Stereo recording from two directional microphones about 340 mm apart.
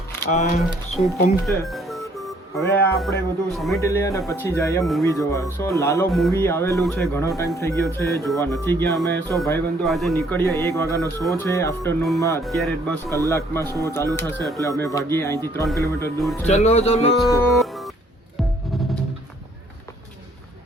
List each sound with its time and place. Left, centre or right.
0.3 s speech: centre
1.5 s music: centre
2.6 s speech: centre
16.5 s speech: centre
17.2 s music: centre